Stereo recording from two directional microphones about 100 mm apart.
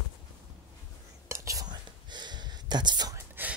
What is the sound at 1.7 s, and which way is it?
Whispering, 45° right (ahead or behind).